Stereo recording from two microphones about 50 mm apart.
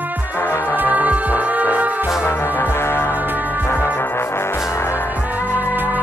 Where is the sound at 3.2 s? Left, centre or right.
Right.